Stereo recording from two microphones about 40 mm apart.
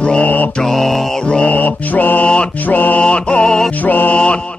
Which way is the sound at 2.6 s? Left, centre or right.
Left.